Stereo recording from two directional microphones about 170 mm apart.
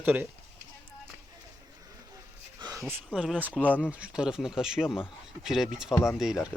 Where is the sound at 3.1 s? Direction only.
5° right (ahead or behind).